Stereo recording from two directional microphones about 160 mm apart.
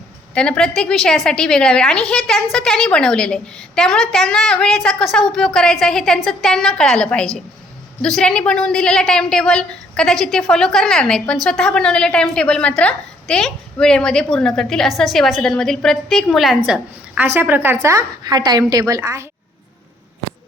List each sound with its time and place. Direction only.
0.3 s a woman's voice: 5° left (ahead or behind); by 19.3 s 20° right (ahead or behind)